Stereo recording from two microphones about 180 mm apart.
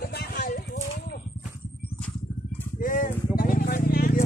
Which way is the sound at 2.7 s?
50° left (ahead or behind).